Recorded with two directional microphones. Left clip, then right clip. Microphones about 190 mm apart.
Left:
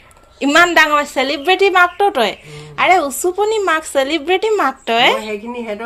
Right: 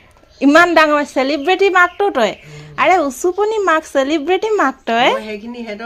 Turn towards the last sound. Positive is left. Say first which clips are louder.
# left 3 dB
turn(degrees=-35)  # may be behind; listen again after turning